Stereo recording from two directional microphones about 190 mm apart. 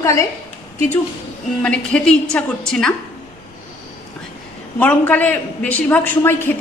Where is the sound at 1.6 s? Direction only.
5° left (ahead or behind).